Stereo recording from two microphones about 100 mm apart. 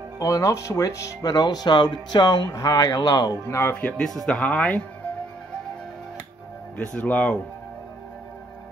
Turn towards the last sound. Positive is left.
turn(degrees=15)  # may be behind; listen again after turning